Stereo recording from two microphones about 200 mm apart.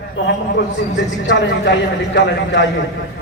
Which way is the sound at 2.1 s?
65° left (ahead or behind).